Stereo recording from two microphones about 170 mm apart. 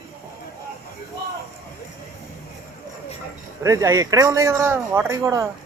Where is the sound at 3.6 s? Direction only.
20° right (ahead or behind).